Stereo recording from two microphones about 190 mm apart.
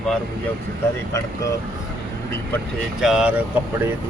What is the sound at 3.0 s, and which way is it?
Speech, 5° right (ahead or behind).